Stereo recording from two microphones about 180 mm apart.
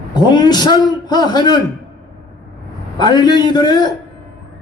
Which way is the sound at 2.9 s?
25° left (ahead or behind).